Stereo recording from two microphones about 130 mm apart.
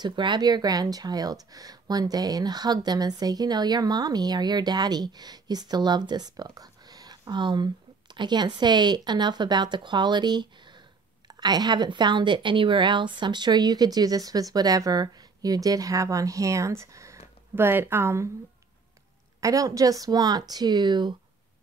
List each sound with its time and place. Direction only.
0.0 s speech: 35° right (ahead or behind); by 18.3 s 20° right (ahead or behind)
19.4 s speech: 25° right (ahead or behind)